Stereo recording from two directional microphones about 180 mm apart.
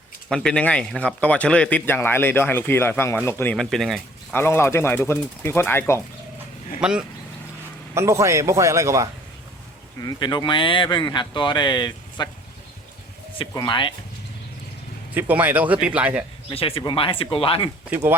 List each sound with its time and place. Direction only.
0.3 s speech: 5° left (ahead or behind)
4.4 s speech: 15° left (ahead or behind)
6.7 s speech: 5° right (ahead or behind)
7.9 s a man's voice: 15° right (ahead or behind)
10.0 s speech: 25° left (ahead or behind)
13.4 s speech: 20° left (ahead or behind)
15.1 s a man's voice: 10° right (ahead or behind)
16.5 s speech: 30° left (ahead or behind)
17.9 s a man's voice: 10° right (ahead or behind)